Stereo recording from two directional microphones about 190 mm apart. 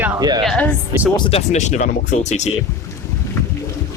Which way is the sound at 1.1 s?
35° left (ahead or behind).